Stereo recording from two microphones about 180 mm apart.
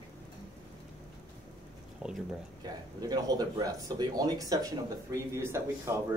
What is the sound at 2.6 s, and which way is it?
Speech, 20° right (ahead or behind).